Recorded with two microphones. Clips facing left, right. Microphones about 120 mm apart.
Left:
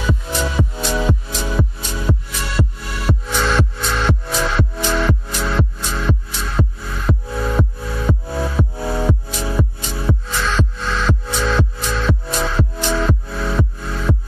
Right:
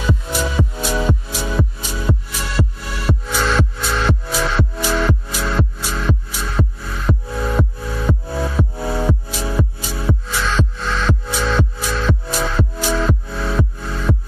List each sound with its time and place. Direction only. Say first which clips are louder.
0.0 s music: even; centre (ahead or behind)